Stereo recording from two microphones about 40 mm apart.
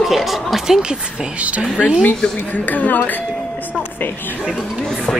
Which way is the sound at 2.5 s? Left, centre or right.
Left.